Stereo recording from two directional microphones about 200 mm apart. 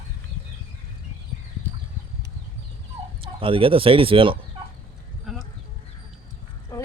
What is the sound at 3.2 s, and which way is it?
Speech, 25° right (ahead or behind).